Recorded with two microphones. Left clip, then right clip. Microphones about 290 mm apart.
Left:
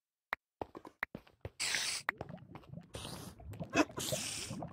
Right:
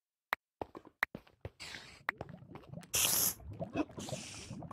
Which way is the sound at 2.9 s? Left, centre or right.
Right.